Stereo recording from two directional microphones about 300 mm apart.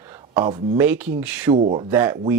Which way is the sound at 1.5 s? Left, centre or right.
Centre.